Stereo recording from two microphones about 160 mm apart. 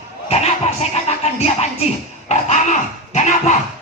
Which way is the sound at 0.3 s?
40° left (ahead or behind).